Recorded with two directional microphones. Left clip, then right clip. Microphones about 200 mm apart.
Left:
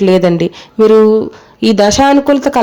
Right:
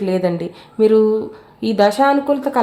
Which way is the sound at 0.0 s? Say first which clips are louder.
Left 9 dB; 35° left (ahead or behind).